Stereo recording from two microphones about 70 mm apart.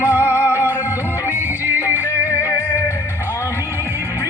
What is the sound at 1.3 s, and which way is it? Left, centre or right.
Music, right.